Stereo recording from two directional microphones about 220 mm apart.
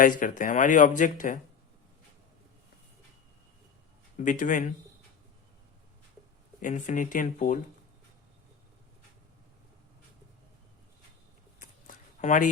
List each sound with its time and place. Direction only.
0.0 s speech: 35° left (ahead or behind)
4.2 s speech: 35° left (ahead or behind)
6.6 s speech: 35° left (ahead or behind)
11.6 s a sound: 35° left (ahead or behind)